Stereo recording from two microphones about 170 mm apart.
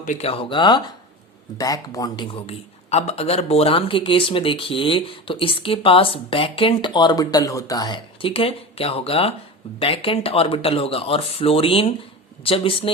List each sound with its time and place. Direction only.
0.0 s speech: 45° left (ahead or behind)
0.3 s a man's voice: 30° left (ahead or behind)